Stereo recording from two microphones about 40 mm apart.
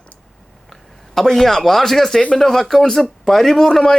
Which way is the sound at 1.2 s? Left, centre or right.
Centre.